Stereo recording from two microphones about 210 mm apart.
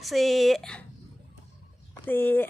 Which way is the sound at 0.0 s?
Centre (ahead or behind).